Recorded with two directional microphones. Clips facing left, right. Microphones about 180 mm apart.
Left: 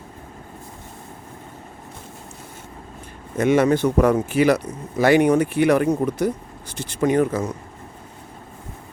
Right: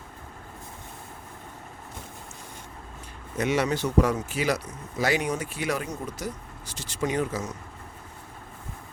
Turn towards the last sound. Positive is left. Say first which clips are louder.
# left 8 dB
turn(degrees=55)  # may be behind; listen again after turning